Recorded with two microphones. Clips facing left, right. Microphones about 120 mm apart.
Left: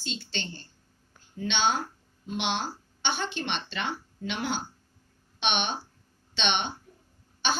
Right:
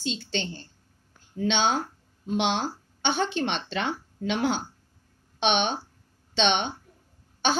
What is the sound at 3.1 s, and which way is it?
Speech, 85° right.